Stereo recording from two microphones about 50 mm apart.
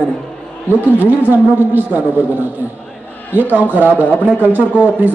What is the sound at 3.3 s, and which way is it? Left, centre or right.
A woman's voice, right.